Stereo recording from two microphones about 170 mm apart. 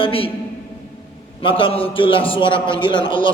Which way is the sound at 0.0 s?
30° left (ahead or behind).